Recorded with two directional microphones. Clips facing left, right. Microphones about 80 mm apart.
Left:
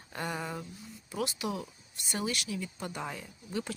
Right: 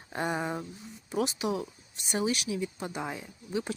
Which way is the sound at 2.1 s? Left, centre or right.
Right.